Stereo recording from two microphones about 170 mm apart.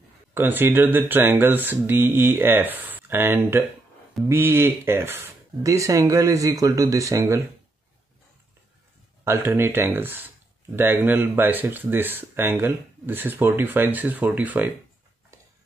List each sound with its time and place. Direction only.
0.3 s speech: 10° right (ahead or behind)
9.2 s speech: 15° right (ahead or behind)